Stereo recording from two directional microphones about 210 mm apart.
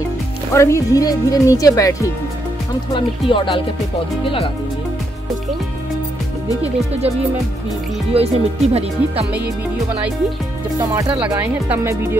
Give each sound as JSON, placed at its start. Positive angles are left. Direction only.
{"t": 0.5, "sound": "speech", "side_deg": 15}
{"t": 2.9, "sound": "music", "side_deg": 20}
{"t": 8.1, "sound": "speech", "side_deg": -30}
{"t": 10.8, "sound": "speech", "side_deg": -20}
{"t": 11.1, "sound": "speech", "side_deg": -5}